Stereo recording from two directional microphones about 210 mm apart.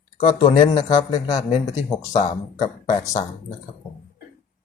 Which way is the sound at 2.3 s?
20° left (ahead or behind).